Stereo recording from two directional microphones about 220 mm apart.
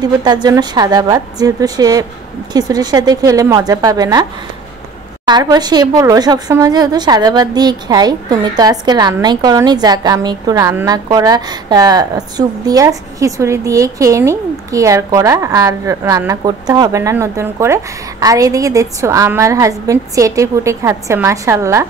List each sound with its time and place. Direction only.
0.0 s a woman's voice: 20° right (ahead or behind)